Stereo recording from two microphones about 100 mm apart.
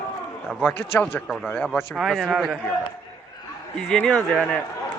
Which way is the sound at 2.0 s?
5° right (ahead or behind).